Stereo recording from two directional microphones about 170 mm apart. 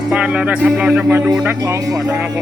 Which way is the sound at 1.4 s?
15° right (ahead or behind).